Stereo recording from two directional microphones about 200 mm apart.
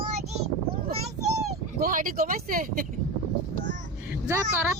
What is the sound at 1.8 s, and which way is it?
Speech, 45° right (ahead or behind).